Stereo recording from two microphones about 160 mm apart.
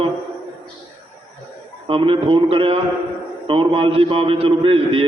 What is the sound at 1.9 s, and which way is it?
A man's voice, 35° right (ahead or behind).